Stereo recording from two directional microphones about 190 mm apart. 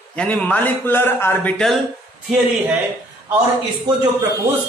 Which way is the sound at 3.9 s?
20° right (ahead or behind).